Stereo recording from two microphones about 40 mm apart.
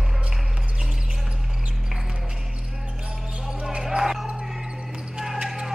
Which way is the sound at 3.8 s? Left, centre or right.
Centre.